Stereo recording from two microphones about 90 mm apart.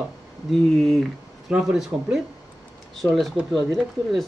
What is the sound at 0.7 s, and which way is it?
Speech, 5° left (ahead or behind).